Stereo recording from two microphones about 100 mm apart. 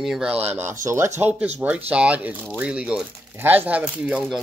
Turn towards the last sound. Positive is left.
turn(degrees=-10)  # may be behind; listen again after turning